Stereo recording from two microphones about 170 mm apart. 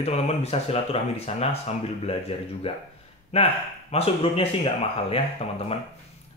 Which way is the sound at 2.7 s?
35° left (ahead or behind).